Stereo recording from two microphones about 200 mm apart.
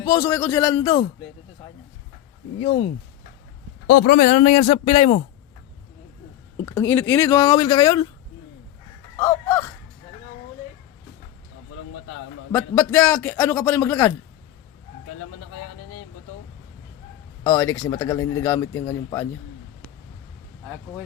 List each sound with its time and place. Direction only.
0.0 s speech: 20° left (ahead or behind)
2.6 s a man's voice: 30° left (ahead or behind)
3.8 s a man's voice: 50° left (ahead or behind); by 5.2 s 30° left (ahead or behind)
6.7 s speech: 10° left (ahead or behind)
9.1 s a sound: 15° left (ahead or behind)
12.5 s speech: 10° left (ahead or behind)
17.4 s speech: 15° left (ahead or behind)